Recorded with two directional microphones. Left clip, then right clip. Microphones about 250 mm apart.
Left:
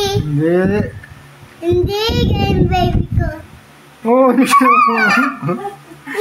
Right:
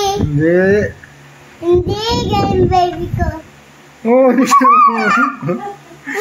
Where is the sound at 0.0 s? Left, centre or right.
Centre.